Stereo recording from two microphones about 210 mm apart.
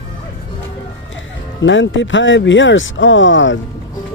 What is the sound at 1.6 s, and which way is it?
Speech, 60° left (ahead or behind).